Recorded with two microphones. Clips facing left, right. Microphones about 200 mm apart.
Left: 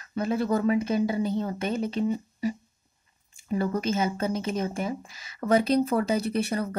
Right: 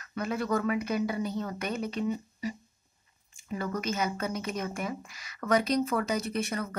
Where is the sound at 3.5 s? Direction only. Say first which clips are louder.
Left 6 dB; 30° left (ahead or behind).